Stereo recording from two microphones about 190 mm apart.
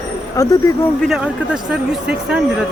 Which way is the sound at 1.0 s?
Centre (ahead or behind).